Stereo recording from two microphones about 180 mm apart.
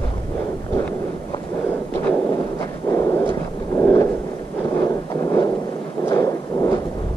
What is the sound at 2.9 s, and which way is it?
Dog, 15° left (ahead or behind).